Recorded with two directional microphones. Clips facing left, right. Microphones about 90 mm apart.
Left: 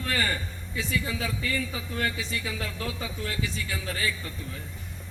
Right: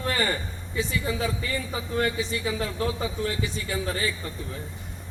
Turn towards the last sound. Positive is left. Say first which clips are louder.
# right 3 dB
turn(degrees=-30)  # may be behind; listen again after turning